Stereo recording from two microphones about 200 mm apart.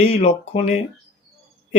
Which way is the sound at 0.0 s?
30° left (ahead or behind).